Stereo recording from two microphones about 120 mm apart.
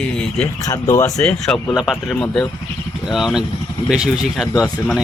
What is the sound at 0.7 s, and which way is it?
Speech, 25° left (ahead or behind).